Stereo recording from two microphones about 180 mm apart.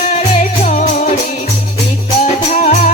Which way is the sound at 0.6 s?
40° left (ahead or behind).